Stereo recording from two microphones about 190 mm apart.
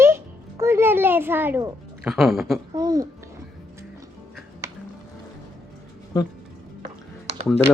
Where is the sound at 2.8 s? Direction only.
20° right (ahead or behind).